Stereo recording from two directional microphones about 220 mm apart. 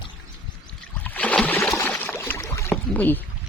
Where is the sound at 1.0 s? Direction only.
5° left (ahead or behind).